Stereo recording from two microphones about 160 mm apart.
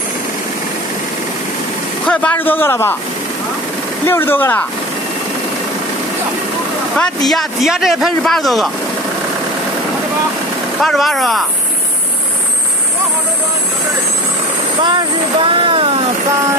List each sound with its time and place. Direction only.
2.0 s a man's voice: 10° left (ahead or behind)
4.0 s a man's voice: 15° left (ahead or behind)
7.0 s a man's voice: centre (ahead or behind)
10.8 s a man's voice: centre (ahead or behind)
14.8 s speech: 30° right (ahead or behind)